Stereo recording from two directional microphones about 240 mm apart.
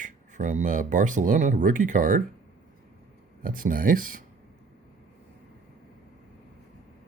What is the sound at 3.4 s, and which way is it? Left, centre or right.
Speech, right.